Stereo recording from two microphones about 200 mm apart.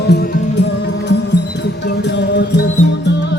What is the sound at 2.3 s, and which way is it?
Music, 60° left (ahead or behind).